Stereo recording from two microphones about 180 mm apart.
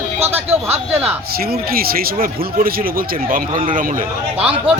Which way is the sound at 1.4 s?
55° right (ahead or behind).